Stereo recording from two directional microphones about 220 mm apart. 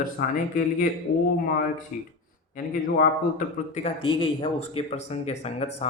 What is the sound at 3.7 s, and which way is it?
Speech, 25° left (ahead or behind).